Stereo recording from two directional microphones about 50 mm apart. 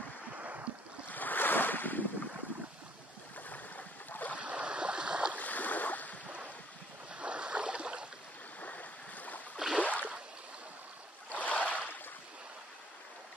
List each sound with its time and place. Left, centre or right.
0.4 s boat: right
1.0 s waves: left
3.4 s stream: left
4.4 s boat: right
5.4 s boat: left
7.2 s boat: right
8.5 s stream: left
9.8 s a sound: left
11.3 s boat: left